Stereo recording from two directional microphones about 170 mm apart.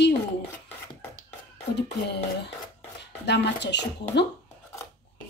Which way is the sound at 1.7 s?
80° left.